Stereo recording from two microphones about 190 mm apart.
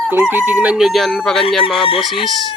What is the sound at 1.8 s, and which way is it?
Crowing, 30° left (ahead or behind).